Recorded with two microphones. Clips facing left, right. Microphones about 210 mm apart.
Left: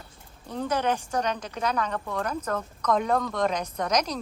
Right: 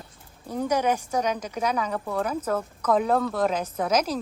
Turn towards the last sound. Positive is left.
turn(degrees=-5)  # may be behind; listen again after turning